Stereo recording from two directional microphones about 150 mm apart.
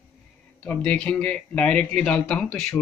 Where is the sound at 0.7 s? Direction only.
10° left (ahead or behind).